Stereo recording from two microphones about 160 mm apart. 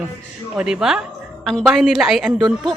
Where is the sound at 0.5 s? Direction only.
5° right (ahead or behind).